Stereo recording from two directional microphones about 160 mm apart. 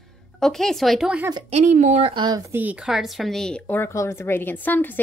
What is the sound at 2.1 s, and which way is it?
Speech, 25° right (ahead or behind).